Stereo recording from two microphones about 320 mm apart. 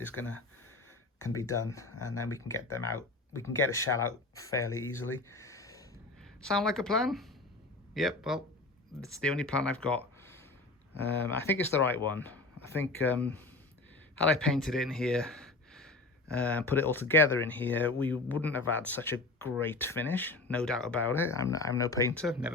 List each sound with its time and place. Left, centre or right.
0.1 s speech: left
1.3 s speech: centre
5.3 s a sound: centre
6.4 s speech: centre
11.4 s speech: centre